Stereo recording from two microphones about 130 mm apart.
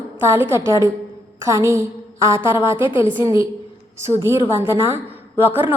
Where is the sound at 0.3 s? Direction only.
20° right (ahead or behind).